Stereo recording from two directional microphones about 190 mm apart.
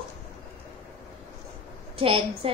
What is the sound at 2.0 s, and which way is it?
Speech, 30° right (ahead or behind).